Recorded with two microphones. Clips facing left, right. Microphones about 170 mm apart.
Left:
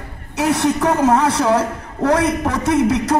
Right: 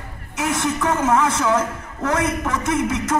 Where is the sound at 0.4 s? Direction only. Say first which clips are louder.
Left 5 dB; 35° left (ahead or behind).